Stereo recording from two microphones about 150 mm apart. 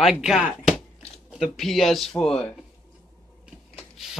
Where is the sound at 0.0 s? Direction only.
5° right (ahead or behind).